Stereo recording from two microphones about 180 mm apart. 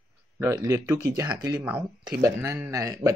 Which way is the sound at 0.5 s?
15° right (ahead or behind).